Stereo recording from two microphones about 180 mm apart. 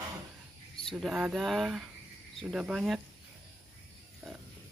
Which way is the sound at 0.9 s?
Centre (ahead or behind).